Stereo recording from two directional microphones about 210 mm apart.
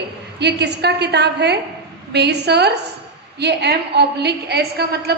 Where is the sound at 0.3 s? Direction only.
55° right (ahead or behind).